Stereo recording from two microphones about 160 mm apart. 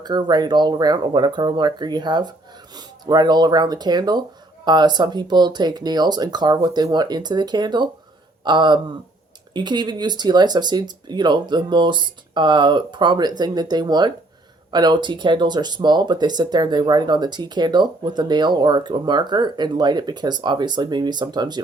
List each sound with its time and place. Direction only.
0.0 s speech: 25° right (ahead or behind)